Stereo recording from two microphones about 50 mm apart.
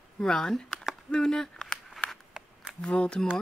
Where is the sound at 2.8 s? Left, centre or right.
Centre.